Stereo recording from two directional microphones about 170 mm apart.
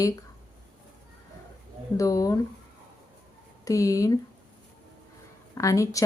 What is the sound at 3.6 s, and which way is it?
Speech, 20° left (ahead or behind).